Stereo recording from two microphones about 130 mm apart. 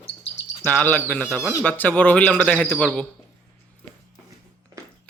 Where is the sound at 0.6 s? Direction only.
15° left (ahead or behind).